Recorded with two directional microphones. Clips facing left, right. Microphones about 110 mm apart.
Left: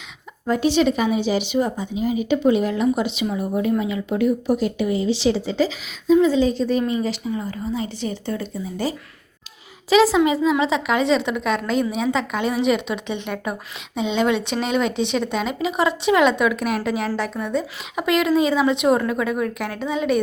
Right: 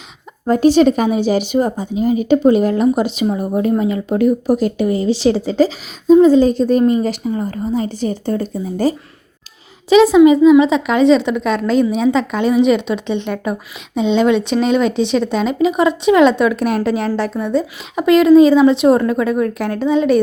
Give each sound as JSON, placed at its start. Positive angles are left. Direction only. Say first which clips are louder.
{"t": 0.4, "sound": "speech", "louder": "right 7 dB", "side_deg": -40}
{"t": 9.9, "sound": "a woman's voice", "louder": "right 8 dB", "side_deg": -20}
{"t": 11.2, "sound": "speech", "louder": "right 5 dB", "side_deg": 20}
{"t": 15.7, "sound": "a woman's voice", "louder": "right 3 dB", "side_deg": -20}
{"t": 16.6, "sound": "speech", "louder": "right 6 dB", "side_deg": 10}
{"t": 17.6, "sound": "a woman's voice", "louder": "right 6 dB", "side_deg": -25}
{"t": 18.3, "sound": "speech", "louder": "right 10 dB", "side_deg": 15}
{"t": 18.6, "sound": "a woman's voice", "louder": "right 7 dB", "side_deg": -30}
{"t": 19.3, "sound": "speech", "louder": "right 7 dB", "side_deg": 10}